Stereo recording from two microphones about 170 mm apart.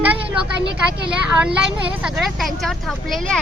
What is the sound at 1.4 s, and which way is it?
Speech, 5° right (ahead or behind).